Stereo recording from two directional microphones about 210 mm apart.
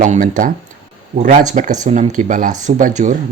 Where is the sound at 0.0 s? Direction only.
40° right (ahead or behind).